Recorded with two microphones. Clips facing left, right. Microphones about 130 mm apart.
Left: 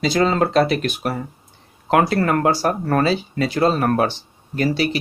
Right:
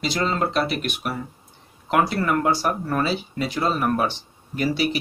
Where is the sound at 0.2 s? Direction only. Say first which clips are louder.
Left 6 dB; 90° left.